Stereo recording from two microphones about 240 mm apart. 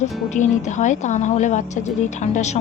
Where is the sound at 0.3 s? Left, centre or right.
Left.